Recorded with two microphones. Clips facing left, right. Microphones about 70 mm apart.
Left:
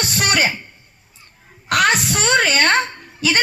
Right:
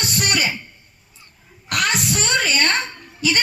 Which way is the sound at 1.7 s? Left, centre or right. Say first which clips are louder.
Left 5 dB; left.